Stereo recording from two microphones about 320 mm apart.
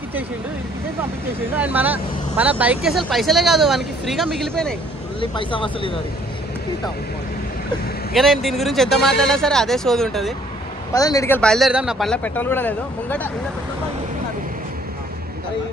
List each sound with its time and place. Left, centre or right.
1.5 s speech: centre
5.3 s speech: centre
8.1 s speech: centre